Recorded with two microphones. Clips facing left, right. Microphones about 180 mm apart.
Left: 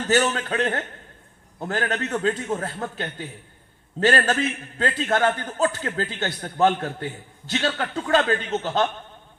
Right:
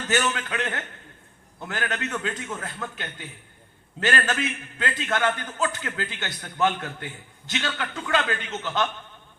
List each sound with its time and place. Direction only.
0.1 s a man's voice: 35° left (ahead or behind)